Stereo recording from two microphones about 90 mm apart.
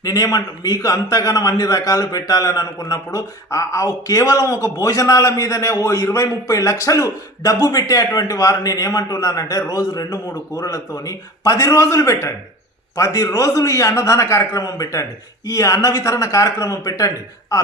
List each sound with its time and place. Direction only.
0.0 s a man's voice: 40° left (ahead or behind)